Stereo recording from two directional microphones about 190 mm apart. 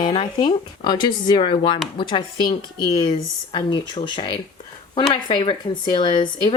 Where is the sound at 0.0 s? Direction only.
25° left (ahead or behind).